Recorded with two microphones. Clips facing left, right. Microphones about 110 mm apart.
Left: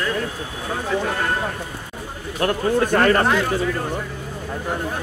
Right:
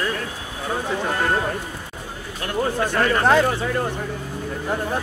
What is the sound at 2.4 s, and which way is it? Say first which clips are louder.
Speech: left 4 dB; 55° left (ahead or behind).